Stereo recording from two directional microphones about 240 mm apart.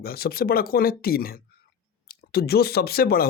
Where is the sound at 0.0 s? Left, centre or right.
Left.